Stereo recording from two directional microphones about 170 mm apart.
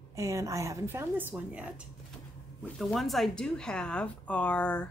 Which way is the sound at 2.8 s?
Centre (ahead or behind).